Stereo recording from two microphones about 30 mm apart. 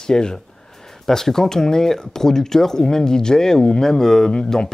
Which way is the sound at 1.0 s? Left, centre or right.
Centre.